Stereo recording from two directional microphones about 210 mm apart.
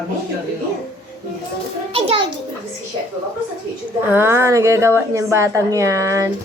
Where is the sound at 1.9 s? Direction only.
25° right (ahead or behind).